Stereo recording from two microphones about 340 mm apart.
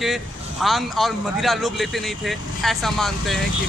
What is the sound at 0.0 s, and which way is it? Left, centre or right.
Speech, centre.